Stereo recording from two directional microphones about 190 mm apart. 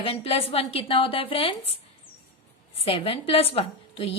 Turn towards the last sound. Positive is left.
turn(degrees=30)  # may be behind; listen again after turning